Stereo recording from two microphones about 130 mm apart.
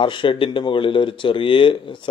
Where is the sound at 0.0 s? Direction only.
40° left (ahead or behind).